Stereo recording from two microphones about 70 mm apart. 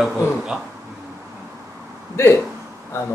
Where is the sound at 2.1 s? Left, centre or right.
Left.